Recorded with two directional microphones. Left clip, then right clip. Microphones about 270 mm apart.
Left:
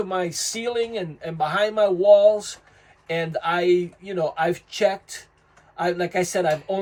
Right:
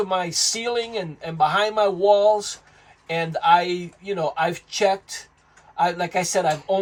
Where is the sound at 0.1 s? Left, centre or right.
Centre.